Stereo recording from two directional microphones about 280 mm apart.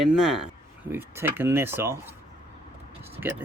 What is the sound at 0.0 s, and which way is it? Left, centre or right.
Speech, centre.